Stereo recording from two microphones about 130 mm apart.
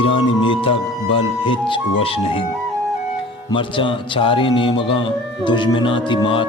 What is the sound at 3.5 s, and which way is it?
Speech, 40° left (ahead or behind).